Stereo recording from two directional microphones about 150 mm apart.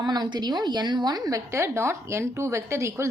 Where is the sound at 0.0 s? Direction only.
30° right (ahead or behind).